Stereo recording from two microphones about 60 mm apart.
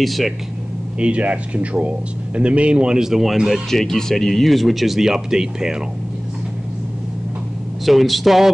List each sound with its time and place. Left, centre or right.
0.0 s speech: centre
0.9 s speech: centre
3.7 s speech: centre
7.8 s speech: centre